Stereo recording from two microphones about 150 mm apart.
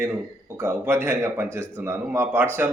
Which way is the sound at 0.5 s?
15° right (ahead or behind).